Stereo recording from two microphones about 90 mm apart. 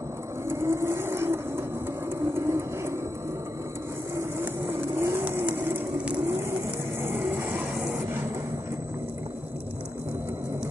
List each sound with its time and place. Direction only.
0.5 s vehicle: 30° right (ahead or behind)
2.1 s a sound: 30° right (ahead or behind)
4.2 s vehicle: 25° right (ahead or behind)
7.0 s music: 25° right (ahead or behind)